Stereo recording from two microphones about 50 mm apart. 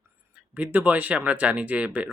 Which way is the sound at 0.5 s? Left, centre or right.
Right.